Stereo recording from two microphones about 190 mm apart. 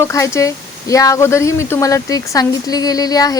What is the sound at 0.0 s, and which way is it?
Speech, 15° left (ahead or behind).